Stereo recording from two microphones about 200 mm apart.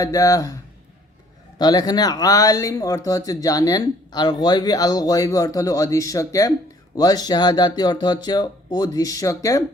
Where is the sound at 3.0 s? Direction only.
20° left (ahead or behind).